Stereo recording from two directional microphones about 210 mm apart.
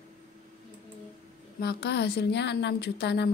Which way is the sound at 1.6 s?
50° left (ahead or behind).